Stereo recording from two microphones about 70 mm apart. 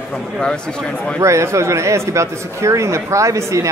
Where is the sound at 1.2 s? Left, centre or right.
Right.